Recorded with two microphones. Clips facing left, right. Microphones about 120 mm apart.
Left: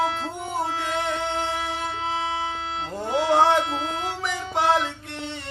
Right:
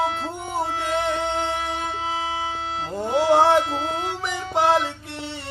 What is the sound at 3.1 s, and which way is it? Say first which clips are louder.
Speech: right 2 dB; 30° right (ahead or behind).